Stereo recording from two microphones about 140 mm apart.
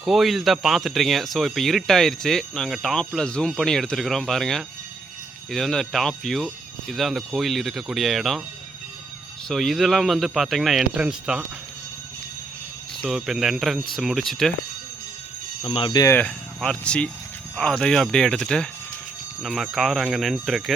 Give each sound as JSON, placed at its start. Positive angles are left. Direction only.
{"t": 0.0, "sound": "speech", "side_deg": 0}
{"t": 9.5, "sound": "speech", "side_deg": 0}
{"t": 13.0, "sound": "speech", "side_deg": 0}
{"t": 15.6, "sound": "speech", "side_deg": 40}
{"t": 15.9, "sound": "speech", "side_deg": 25}
{"t": 16.6, "sound": "speech", "side_deg": 5}